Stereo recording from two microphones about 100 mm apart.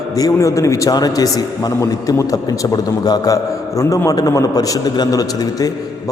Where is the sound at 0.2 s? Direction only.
35° left (ahead or behind).